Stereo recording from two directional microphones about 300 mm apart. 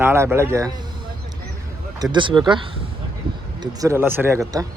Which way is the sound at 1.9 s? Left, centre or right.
Centre.